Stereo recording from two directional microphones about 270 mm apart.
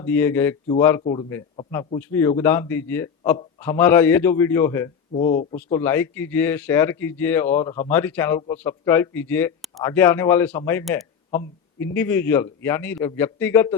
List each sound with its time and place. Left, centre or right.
0.0 s a man's voice: centre
5.1 s speech: left
5.7 s a man's voice: centre